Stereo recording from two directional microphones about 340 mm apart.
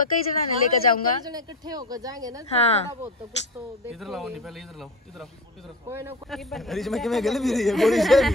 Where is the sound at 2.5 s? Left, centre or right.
Centre.